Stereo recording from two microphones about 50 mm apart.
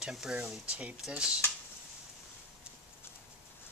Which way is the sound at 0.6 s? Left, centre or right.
Right.